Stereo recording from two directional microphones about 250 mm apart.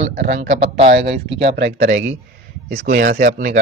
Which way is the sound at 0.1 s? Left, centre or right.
Right.